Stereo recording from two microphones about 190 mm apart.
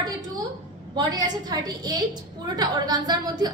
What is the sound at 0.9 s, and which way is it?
A woman's voice, 20° right (ahead or behind).